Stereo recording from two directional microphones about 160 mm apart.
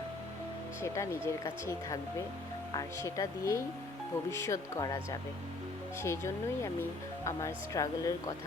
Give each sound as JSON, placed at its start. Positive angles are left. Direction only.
{"t": 0.8, "sound": "speech", "side_deg": 15}
{"t": 6.0, "sound": "speech", "side_deg": 15}